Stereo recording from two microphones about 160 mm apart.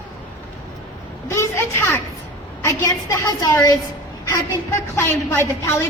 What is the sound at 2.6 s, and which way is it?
A woman's voice, 20° left (ahead or behind).